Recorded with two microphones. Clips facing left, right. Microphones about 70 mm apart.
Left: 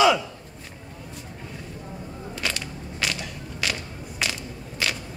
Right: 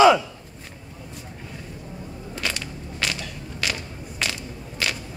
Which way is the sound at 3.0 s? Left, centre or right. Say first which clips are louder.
Even; centre.